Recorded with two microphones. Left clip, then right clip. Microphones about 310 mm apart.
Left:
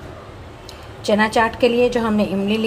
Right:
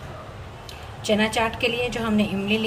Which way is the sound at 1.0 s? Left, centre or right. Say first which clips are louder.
Left 6 dB; centre.